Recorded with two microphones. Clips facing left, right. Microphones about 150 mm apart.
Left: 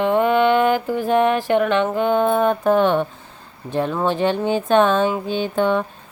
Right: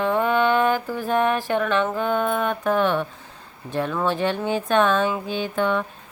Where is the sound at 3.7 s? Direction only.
30° left (ahead or behind).